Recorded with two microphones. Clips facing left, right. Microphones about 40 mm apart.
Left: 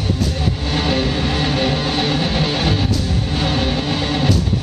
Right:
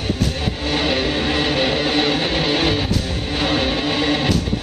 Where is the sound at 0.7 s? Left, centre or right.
Centre.